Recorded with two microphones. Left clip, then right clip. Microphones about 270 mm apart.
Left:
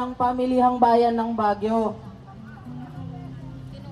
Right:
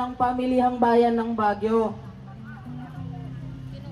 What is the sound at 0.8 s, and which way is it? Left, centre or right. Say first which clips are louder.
Speech: left 2 dB; left.